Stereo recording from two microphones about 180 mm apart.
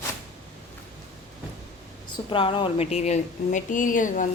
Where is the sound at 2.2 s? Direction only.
30° left (ahead or behind); by 4.3 s 45° left (ahead or behind).